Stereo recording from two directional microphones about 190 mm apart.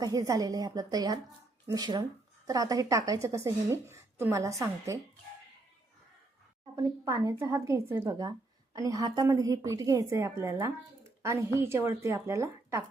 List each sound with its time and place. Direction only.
0.0 s a woman's voice: 20° right (ahead or behind)
6.7 s a woman's voice: 15° right (ahead or behind)